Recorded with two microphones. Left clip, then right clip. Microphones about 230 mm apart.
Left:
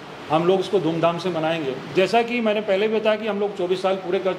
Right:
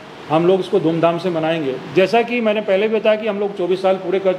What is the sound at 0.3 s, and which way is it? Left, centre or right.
A man's voice, right.